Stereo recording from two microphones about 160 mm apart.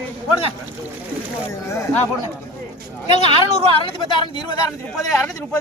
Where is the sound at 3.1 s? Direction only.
40° left (ahead or behind).